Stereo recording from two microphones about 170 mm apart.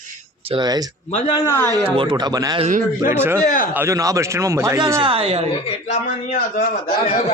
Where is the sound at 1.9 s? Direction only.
25° right (ahead or behind).